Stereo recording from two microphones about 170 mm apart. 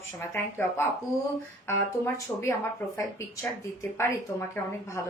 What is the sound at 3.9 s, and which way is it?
Speech, 15° left (ahead or behind).